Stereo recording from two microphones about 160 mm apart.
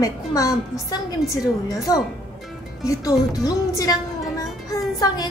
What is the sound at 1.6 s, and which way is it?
A child's voice, 20° left (ahead or behind).